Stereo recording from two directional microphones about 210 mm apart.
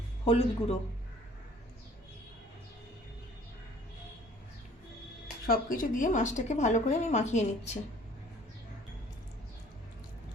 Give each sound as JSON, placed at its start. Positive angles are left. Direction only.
{"t": 0.3, "sound": "speech", "side_deg": 30}
{"t": 5.5, "sound": "a woman's voice", "side_deg": 40}